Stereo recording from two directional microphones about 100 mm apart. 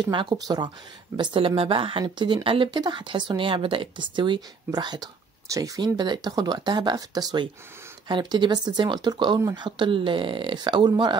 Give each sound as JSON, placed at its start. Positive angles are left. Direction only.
{"t": 0.0, "sound": "speech", "side_deg": -50}
{"t": 1.1, "sound": "speech", "side_deg": -60}
{"t": 4.6, "sound": "speech", "side_deg": -45}